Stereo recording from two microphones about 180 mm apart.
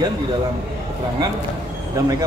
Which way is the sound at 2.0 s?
15° right (ahead or behind).